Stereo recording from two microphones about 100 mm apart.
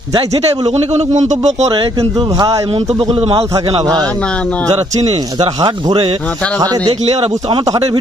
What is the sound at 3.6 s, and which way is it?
Speech, 50° right (ahead or behind).